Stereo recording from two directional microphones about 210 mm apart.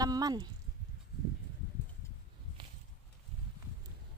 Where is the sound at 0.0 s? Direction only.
20° right (ahead or behind).